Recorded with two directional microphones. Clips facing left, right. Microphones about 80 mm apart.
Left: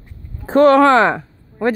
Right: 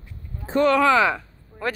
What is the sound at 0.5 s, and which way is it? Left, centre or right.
Speech, left.